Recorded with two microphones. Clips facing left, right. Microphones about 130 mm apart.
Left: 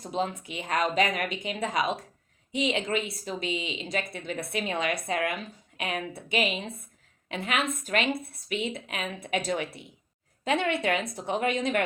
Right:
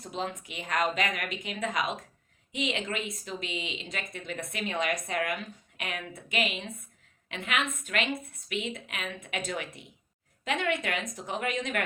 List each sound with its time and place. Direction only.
0.2 s a woman's voice: 35° left (ahead or behind)